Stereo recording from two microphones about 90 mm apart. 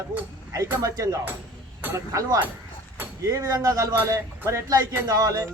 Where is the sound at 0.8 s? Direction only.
40° right (ahead or behind).